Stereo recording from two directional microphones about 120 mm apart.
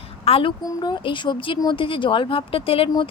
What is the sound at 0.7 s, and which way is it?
Speech, 35° left (ahead or behind).